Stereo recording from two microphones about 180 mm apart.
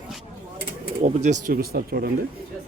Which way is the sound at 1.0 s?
40° right (ahead or behind).